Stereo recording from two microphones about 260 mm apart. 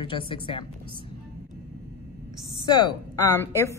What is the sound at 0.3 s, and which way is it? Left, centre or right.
Speech, left.